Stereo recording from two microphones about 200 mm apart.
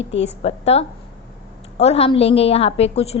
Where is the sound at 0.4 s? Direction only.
30° left (ahead or behind).